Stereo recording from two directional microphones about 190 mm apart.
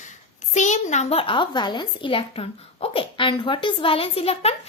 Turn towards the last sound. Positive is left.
turn(degrees=30)  # may be behind; listen again after turning